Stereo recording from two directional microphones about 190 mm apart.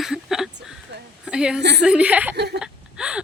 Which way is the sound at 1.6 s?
65° right (ahead or behind).